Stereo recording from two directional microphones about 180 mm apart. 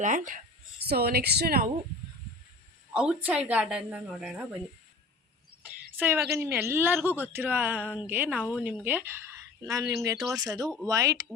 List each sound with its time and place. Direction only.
0.0 s speech: 45° right (ahead or behind)
0.8 s a woman's voice: 60° right (ahead or behind)
2.9 s speech: 5° right (ahead or behind)
6.0 s a woman's voice: 10° right (ahead or behind)